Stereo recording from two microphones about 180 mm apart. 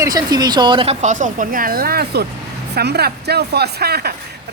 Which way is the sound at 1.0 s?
45° right (ahead or behind).